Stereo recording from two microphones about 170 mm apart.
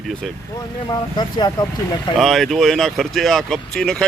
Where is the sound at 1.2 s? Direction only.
25° left (ahead or behind).